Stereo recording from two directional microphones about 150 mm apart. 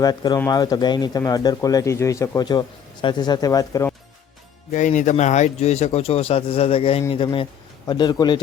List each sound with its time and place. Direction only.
0.0 s speech: 25° left (ahead or behind)
4.7 s speech: 55° left (ahead or behind); by 8.4 s 30° left (ahead or behind)